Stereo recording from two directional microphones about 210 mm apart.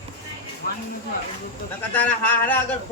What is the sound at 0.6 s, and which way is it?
Speech, 45° left (ahead or behind).